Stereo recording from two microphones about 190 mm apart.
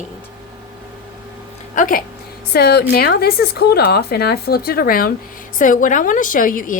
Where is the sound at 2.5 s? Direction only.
55° left (ahead or behind).